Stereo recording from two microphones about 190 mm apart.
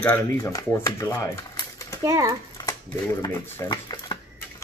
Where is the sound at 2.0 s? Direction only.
15° right (ahead or behind).